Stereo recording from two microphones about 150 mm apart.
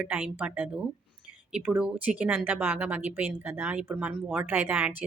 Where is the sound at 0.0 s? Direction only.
10° right (ahead or behind).